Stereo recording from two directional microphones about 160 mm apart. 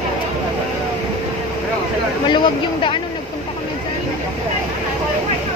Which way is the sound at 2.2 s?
30° left (ahead or behind).